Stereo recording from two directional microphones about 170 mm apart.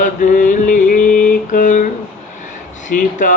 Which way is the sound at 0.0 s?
50° left (ahead or behind).